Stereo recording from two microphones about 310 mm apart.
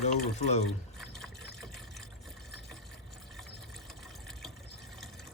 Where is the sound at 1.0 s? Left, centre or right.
Centre.